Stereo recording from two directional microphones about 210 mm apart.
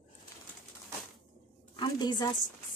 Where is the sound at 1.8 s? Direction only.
20° left (ahead or behind).